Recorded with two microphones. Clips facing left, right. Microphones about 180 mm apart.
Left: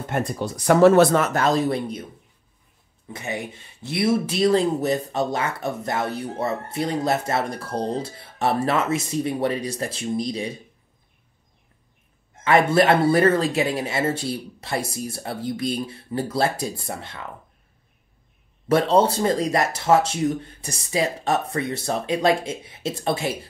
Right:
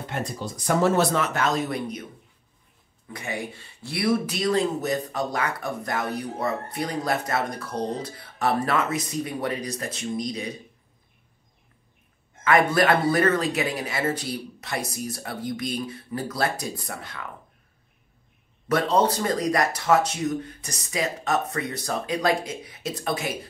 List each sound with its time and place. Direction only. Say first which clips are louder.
0.0 s speech: left 5 dB; 55° left (ahead or behind); by 1.0 s 70° left (ahead or behind)
1.1 s speech: left 4 dB; 40° left (ahead or behind)
3.1 s speech: left 2 dB; 20° left (ahead or behind)
12.4 s speech: left 3 dB; 25° left (ahead or behind)
18.7 s speech: left 4 dB; 30° left (ahead or behind)